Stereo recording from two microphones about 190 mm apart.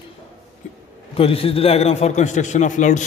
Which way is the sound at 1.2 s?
30° left (ahead or behind).